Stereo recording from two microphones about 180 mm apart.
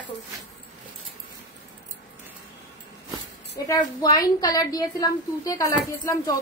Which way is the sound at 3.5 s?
20° left (ahead or behind).